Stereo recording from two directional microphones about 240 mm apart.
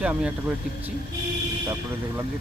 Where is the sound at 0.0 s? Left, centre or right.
Centre.